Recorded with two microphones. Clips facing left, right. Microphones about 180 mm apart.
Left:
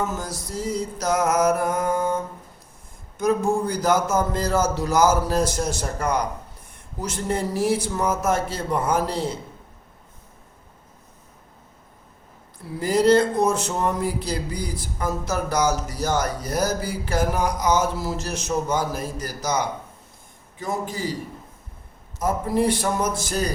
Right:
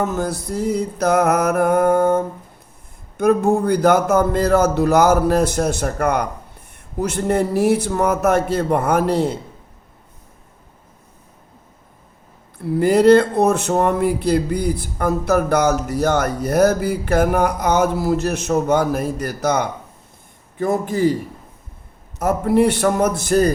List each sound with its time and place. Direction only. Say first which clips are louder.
0.0 s a man's voice: right 6 dB; 60° right (ahead or behind)
12.6 s a man's voice: right 6 dB; 60° right (ahead or behind)
22.2 s a man's voice: right 6 dB; 65° right (ahead or behind)